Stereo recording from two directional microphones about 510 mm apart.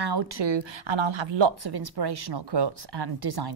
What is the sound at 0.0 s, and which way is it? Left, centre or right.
Speech, right.